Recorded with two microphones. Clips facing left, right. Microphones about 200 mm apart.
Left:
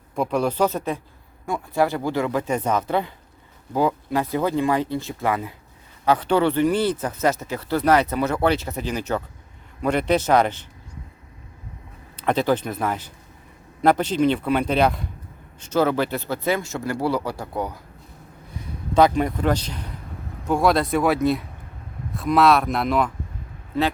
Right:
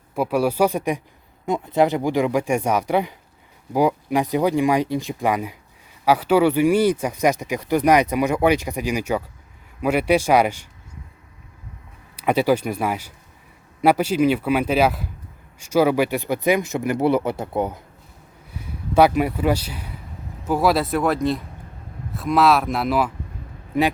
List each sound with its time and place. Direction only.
0.2 s speech: 10° right (ahead or behind)
12.1 s speech: 10° right (ahead or behind)
18.9 s speech: 10° right (ahead or behind)